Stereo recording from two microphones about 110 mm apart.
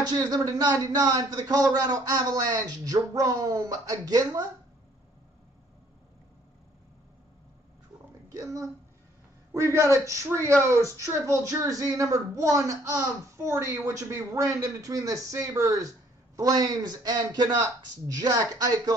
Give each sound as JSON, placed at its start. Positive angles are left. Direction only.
{"t": 0.1, "sound": "a woman's voice", "side_deg": -35}
{"t": 8.3, "sound": "a man's voice", "side_deg": -30}